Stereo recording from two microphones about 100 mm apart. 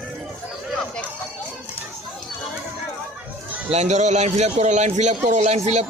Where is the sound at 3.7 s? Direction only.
90° right.